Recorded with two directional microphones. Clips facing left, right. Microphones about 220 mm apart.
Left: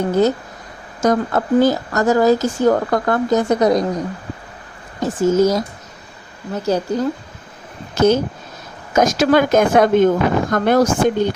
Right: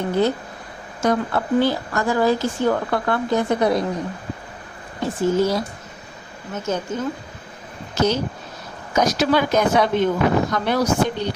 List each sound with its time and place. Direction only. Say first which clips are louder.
0.1 s speech: left 2 dB; 45° left (ahead or behind)
4.9 s speech: left 4 dB; 45° left (ahead or behind)
7.9 s speech: left 6 dB; 50° left (ahead or behind)